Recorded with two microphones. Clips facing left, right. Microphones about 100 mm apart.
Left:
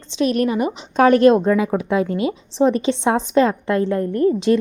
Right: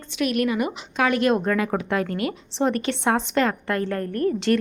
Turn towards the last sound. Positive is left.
turn(degrees=15)  # may be behind; listen again after turning